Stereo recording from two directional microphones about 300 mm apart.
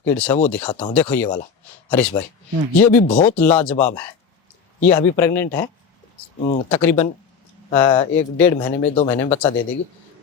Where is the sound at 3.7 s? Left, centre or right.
Left.